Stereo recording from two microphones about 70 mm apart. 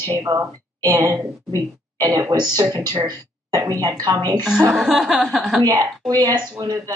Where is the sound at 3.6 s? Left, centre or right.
Right.